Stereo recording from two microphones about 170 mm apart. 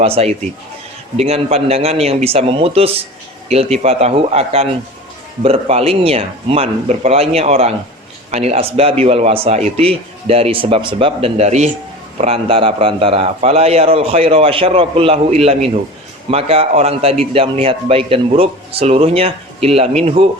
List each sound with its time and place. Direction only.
0.0 s speech: 35° right (ahead or behind)